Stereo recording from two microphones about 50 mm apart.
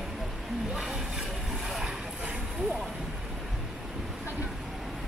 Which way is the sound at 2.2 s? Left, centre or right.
Right.